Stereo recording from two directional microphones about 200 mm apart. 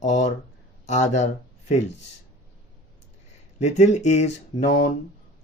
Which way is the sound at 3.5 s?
35° left (ahead or behind).